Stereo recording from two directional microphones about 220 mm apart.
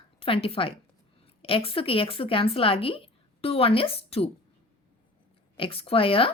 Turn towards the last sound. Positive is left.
turn(degrees=25)  # may be behind; listen again after turning